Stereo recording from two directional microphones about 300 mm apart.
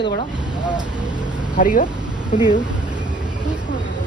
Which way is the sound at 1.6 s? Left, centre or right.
Left.